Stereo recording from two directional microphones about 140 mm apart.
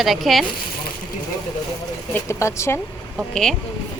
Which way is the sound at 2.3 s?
20° left (ahead or behind).